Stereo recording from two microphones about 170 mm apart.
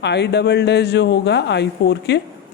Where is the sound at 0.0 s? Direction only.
85° left.